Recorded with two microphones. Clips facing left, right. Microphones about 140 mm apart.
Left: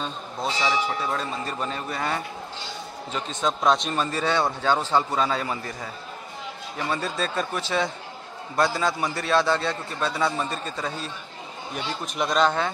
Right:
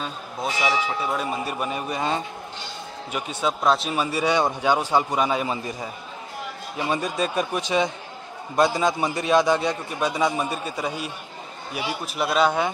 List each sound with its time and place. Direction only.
0.0 s a man's voice: 5° right (ahead or behind)